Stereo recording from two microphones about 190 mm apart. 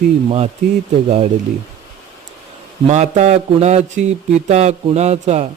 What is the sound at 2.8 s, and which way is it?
A man's voice, 35° right (ahead or behind).